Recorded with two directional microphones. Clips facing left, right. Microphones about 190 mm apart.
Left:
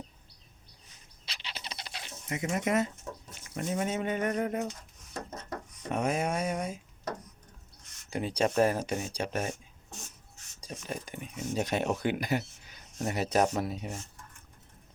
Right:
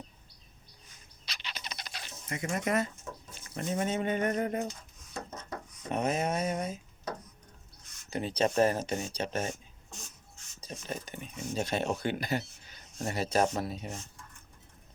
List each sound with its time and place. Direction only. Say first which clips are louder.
1.2 s bird: even; 30° left (ahead or behind)
3.5 s speech: even; 5° left (ahead or behind)
5.9 s speech: even; 10° left (ahead or behind)
8.1 s speech: even; 10° left (ahead or behind)
10.6 s speech: left 1 dB; 10° left (ahead or behind)